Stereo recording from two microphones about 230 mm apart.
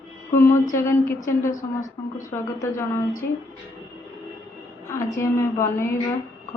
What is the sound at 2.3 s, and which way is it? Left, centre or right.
Speech, centre.